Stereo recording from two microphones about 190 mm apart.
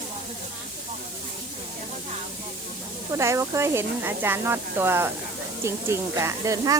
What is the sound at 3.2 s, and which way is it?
Speech, 15° right (ahead or behind).